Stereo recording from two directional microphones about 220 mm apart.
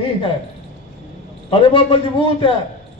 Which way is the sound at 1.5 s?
25° left (ahead or behind).